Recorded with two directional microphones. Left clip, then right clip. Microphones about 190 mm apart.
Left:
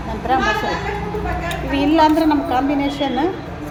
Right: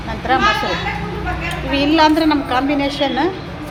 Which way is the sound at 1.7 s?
Centre (ahead or behind).